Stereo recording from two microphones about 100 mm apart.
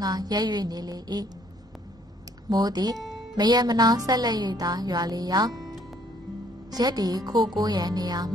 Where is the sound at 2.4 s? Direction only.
40° right (ahead or behind).